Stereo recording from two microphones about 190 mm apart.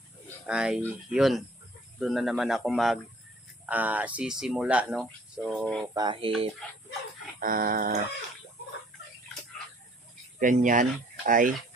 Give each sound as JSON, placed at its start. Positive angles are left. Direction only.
{"t": 0.4, "sound": "a man's voice", "side_deg": -5}
{"t": 5.8, "sound": "a sound", "side_deg": -20}
{"t": 7.3, "sound": "speech", "side_deg": -50}
{"t": 10.4, "sound": "speech", "side_deg": -40}